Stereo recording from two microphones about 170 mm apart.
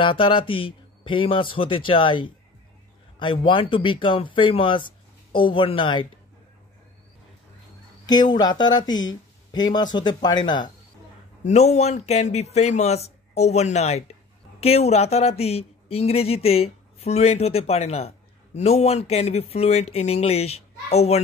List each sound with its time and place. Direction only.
0.0 s speech: 30° left (ahead or behind)
8.1 s speech: 25° left (ahead or behind)
11.4 s speech: 40° left (ahead or behind)